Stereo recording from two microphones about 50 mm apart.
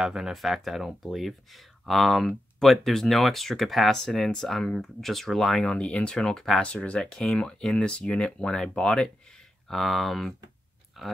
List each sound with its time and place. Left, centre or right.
0.0 s speech: centre
5.7 s speech: centre
6.6 s speech: left; by 11.1 s centre